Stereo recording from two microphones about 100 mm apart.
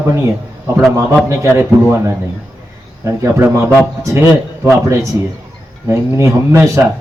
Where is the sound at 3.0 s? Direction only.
30° right (ahead or behind).